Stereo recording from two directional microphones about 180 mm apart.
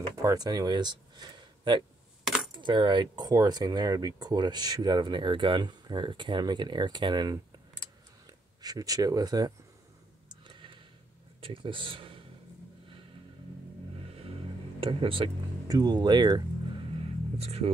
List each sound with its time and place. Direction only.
0.2 s speech: 20° right (ahead or behind)
2.2 s coin: centre (ahead or behind)
2.5 s speech: 25° right (ahead or behind)
8.6 s speech: 20° right (ahead or behind)
10.5 s a sound: 25° right (ahead or behind)
11.4 s speech: 30° right (ahead or behind)
14.8 s speech: 30° right (ahead or behind)
17.4 s speech: 35° right (ahead or behind)